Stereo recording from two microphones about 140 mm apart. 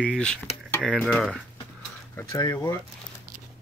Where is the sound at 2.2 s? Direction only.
30° left (ahead or behind).